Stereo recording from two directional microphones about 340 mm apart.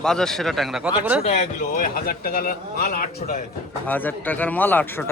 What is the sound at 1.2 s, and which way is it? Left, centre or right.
Speech, left.